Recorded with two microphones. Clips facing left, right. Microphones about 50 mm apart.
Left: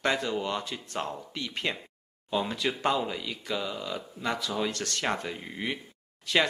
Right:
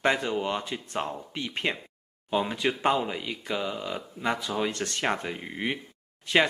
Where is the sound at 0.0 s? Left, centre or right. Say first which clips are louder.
Right 2 dB; centre.